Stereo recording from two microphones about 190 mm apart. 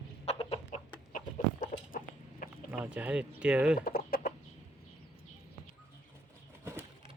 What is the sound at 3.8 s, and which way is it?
Chicken, 50° left (ahead or behind).